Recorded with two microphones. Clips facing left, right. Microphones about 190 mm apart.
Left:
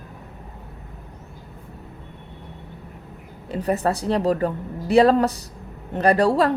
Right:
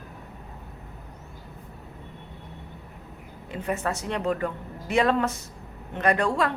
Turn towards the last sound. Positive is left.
turn(degrees=35)  # may be behind; listen again after turning